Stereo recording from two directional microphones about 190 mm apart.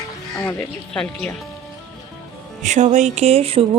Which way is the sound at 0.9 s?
5° left (ahead or behind).